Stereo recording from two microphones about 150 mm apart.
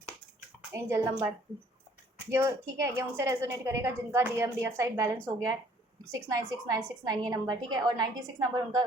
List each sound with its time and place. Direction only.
0.7 s a woman's voice: 20° right (ahead or behind)